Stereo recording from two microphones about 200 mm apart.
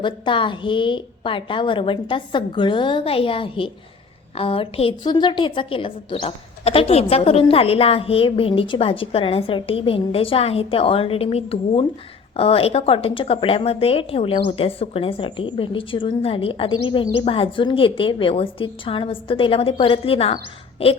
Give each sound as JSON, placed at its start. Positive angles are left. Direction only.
{"t": 0.0, "sound": "a woman's voice", "side_deg": 25}